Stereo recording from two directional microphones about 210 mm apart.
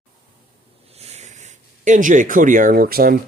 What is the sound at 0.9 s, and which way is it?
Speech, 30° right (ahead or behind).